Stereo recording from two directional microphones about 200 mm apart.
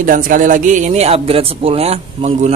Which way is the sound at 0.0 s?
40° right (ahead or behind).